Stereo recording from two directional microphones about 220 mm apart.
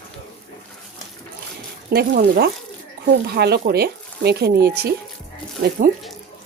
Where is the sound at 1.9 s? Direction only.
45° right (ahead or behind).